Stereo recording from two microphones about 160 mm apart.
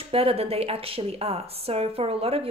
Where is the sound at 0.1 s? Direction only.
35° right (ahead or behind).